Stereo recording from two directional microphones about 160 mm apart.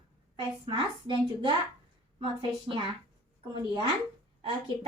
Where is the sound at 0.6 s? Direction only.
30° right (ahead or behind).